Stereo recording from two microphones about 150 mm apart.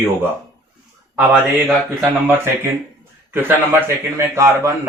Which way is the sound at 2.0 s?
15° right (ahead or behind).